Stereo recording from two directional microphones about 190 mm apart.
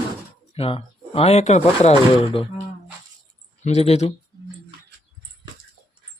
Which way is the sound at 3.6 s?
35° left (ahead or behind).